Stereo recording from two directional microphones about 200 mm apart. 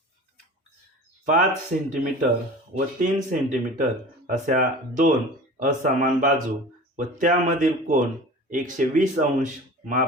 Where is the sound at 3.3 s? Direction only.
40° right (ahead or behind).